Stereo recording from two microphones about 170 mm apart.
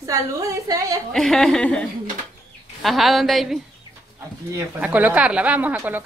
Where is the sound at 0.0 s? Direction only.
20° right (ahead or behind).